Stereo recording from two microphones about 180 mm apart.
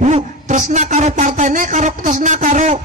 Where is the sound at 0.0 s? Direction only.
40° right (ahead or behind).